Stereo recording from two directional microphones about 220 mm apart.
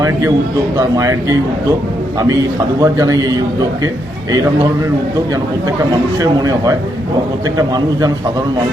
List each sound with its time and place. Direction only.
0.8 s speech: 15° right (ahead or behind)
2.8 s speech: 15° right (ahead or behind)
6.1 s speech: 15° right (ahead or behind)